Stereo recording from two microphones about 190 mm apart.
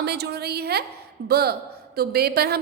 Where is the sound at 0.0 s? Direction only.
60° right (ahead or behind).